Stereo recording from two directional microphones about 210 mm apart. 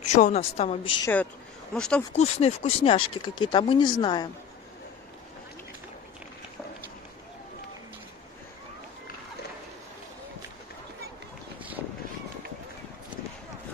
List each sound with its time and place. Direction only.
0.0 s speech: 35° left (ahead or behind)
1.0 s speech: 5° left (ahead or behind)
2.1 s speech: 30° left (ahead or behind)